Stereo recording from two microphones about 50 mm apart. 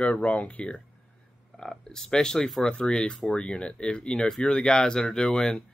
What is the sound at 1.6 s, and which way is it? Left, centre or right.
Speech, centre.